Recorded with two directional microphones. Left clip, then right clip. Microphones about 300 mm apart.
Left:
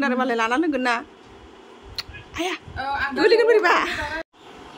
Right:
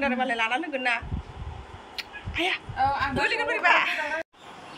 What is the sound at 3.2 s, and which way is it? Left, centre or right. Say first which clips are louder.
A woman's voice: left 10 dB; centre.